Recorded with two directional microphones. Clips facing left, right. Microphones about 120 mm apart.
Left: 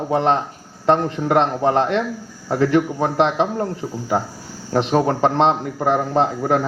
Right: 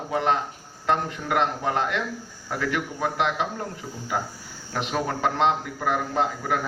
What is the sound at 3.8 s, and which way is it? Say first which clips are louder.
A man's voice: left 7 dB; 40° left (ahead or behind).